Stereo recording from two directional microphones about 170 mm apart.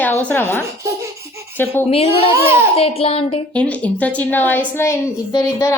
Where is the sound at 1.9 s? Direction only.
35° left (ahead or behind).